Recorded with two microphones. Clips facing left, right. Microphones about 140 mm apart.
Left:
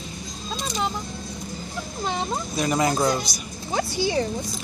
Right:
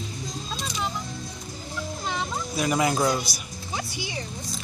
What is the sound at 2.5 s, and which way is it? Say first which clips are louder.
Speech: left 1 dB; 5° right (ahead or behind).